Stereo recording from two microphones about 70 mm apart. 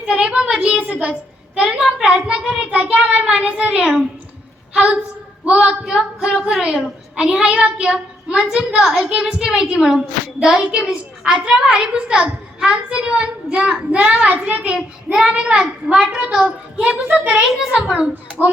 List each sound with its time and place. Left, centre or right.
0.0 s a child's voice: centre
1.5 s a child's voice: centre